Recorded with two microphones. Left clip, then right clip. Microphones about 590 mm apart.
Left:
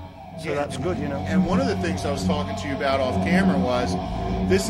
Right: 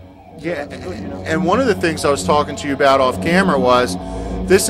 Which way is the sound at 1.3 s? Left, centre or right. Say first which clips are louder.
Right 10 dB; right.